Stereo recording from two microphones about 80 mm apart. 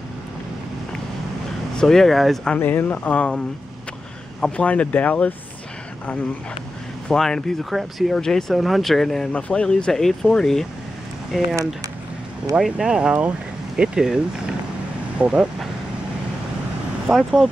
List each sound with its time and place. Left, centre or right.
1.8 s speech: centre
2.5 s speech: left
7.1 s speech: centre
11.3 s speech: centre
12.5 s speech: centre
17.1 s speech: centre